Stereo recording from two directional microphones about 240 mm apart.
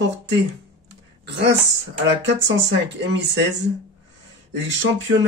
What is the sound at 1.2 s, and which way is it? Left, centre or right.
Speech, right.